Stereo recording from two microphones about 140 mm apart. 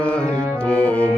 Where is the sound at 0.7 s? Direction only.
10° left (ahead or behind).